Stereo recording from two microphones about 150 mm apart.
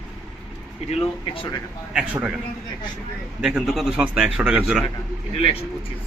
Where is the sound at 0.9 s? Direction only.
35° left (ahead or behind).